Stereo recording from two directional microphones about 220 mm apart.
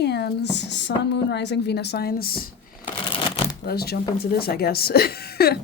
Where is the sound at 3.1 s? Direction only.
25° left (ahead or behind).